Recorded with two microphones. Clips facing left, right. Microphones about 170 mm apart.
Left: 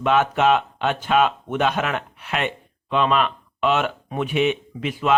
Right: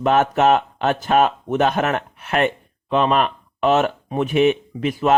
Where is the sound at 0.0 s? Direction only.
45° right (ahead or behind).